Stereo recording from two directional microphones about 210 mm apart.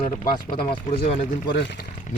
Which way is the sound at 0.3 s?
25° left (ahead or behind).